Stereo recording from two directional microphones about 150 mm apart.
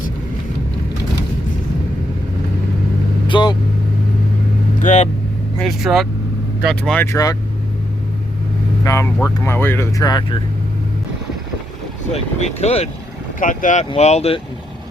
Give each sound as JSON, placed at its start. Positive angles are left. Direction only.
{"t": 3.2, "sound": "speech", "side_deg": 30}
{"t": 4.8, "sound": "vehicle", "side_deg": 55}
{"t": 5.5, "sound": "vehicle", "side_deg": 0}
{"t": 6.6, "sound": "speech", "side_deg": 0}
{"t": 7.0, "sound": "speech", "side_deg": 20}
{"t": 8.8, "sound": "speech", "side_deg": 20}
{"t": 12.1, "sound": "speech", "side_deg": 45}
{"t": 13.4, "sound": "speech", "side_deg": 60}
{"t": 13.9, "sound": "speech", "side_deg": 45}